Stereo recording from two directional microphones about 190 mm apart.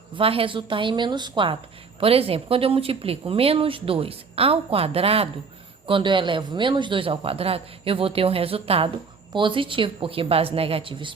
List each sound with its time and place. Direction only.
0.1 s speech: 30° right (ahead or behind)